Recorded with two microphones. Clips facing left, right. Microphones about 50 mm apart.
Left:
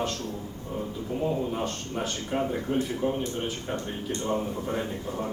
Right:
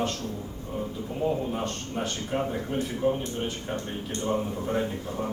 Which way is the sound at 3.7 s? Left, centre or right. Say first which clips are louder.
Left 1 dB; centre.